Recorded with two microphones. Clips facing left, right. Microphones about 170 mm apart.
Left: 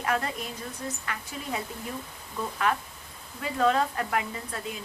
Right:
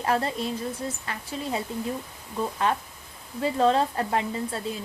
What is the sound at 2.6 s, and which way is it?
Speech, 30° right (ahead or behind).